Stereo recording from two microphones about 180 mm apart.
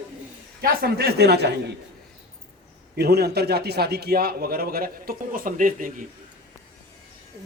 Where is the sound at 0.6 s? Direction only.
60° right (ahead or behind).